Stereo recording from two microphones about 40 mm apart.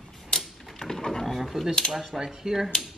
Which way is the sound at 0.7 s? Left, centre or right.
Centre.